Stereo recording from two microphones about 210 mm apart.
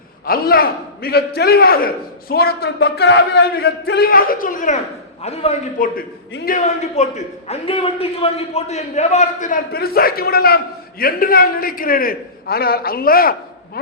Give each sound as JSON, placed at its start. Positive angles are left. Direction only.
{"t": 0.3, "sound": "a man's voice", "side_deg": 45}
{"t": 6.0, "sound": "speech", "side_deg": 45}
{"t": 6.6, "sound": "a man's voice", "side_deg": 30}